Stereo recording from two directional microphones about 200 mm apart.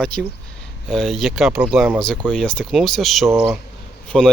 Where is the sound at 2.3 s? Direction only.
5° left (ahead or behind).